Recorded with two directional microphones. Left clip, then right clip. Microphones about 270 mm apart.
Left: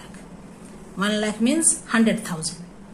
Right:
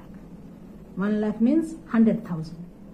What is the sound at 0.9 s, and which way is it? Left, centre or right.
A woman's voice, centre.